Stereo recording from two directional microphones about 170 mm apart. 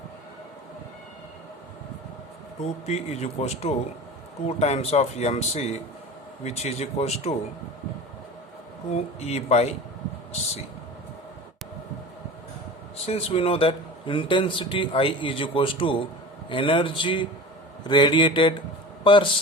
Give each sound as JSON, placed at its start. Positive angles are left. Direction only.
{"t": 2.8, "sound": "a man's voice", "side_deg": 40}
{"t": 8.9, "sound": "a man's voice", "side_deg": 40}
{"t": 13.1, "sound": "a man's voice", "side_deg": 35}